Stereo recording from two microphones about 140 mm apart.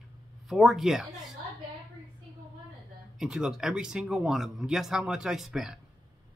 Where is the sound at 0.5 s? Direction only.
Centre (ahead or behind).